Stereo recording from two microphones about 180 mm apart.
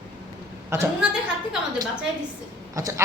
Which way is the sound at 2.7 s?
20° right (ahead or behind).